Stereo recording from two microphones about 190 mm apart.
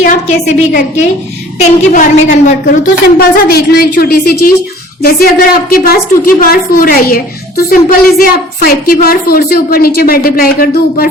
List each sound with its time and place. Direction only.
0.0 s a woman's voice: 45° left (ahead or behind)
3.2 s a woman's voice: 55° left (ahead or behind)